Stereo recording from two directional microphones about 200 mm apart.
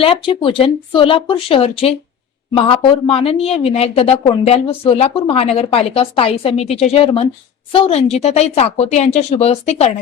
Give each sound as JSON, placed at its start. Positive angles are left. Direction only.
{"t": 0.0, "sound": "a woman's voice", "side_deg": 25}